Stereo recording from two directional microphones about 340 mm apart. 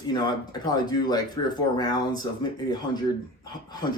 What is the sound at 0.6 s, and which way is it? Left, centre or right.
Speech, centre.